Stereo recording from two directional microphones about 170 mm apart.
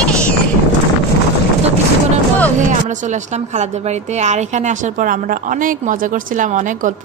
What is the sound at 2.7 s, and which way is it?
A woman's voice, 45° right (ahead or behind).